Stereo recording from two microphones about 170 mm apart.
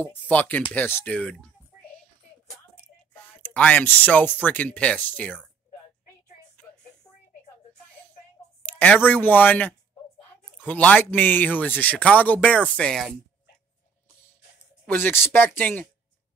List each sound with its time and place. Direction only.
0.0 s speech: 10° left (ahead or behind)
2.7 s speech: 10° left (ahead or behind)
6.6 s music: 10° left (ahead or behind)
8.6 s speech: 10° left (ahead or behind)
14.9 s speech: 10° left (ahead or behind)